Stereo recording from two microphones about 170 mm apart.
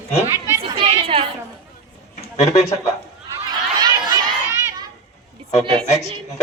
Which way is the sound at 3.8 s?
25° right (ahead or behind).